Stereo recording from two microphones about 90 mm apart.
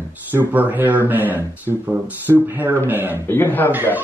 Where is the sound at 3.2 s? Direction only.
25° left (ahead or behind).